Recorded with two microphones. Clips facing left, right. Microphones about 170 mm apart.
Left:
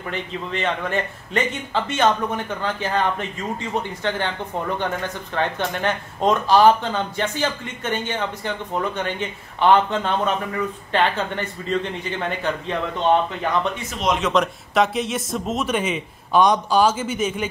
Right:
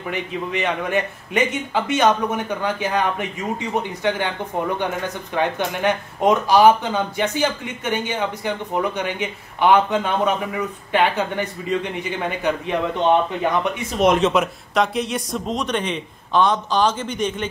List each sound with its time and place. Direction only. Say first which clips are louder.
0.1 s speech: right 3 dB; 15° right (ahead or behind)
5.3 s speech: right 2 dB; 10° right (ahead or behind)
13.9 s speech: right 7 dB; 50° right (ahead or behind)
14.3 s a man's voice: even; centre (ahead or behind)